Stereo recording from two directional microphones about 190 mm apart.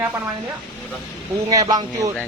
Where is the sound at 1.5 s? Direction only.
20° right (ahead or behind).